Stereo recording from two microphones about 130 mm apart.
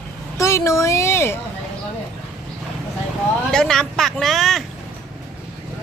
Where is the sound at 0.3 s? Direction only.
20° left (ahead or behind).